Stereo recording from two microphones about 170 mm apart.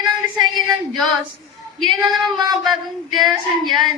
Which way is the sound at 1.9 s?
25° right (ahead or behind).